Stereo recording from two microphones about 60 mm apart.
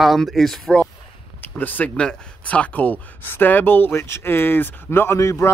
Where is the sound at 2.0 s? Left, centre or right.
Centre; by 5.2 s left.